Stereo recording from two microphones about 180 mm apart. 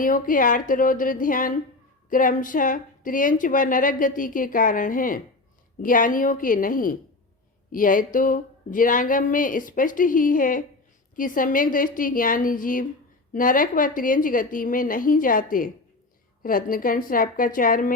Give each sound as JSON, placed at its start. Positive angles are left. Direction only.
{"t": 0.0, "sound": "speech", "side_deg": 50}